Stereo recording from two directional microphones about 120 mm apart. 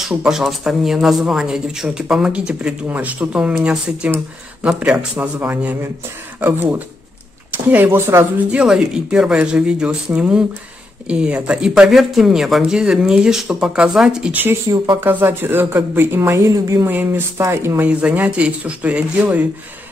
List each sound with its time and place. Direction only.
0.0 s speech: 5° right (ahead or behind)
8.5 s speech: 5° right (ahead or behind); by 16.8 s 30° right (ahead or behind)
16.8 s speech: 15° right (ahead or behind)